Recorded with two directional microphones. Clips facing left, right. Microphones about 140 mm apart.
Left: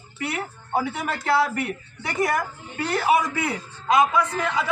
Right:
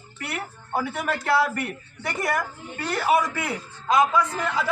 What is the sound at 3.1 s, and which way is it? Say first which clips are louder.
A man's voice: left 1 dB; centre (ahead or behind).